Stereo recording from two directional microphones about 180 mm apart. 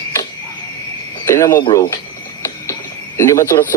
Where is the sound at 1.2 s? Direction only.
15° left (ahead or behind).